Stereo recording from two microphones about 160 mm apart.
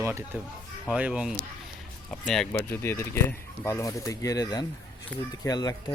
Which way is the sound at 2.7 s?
15° left (ahead or behind).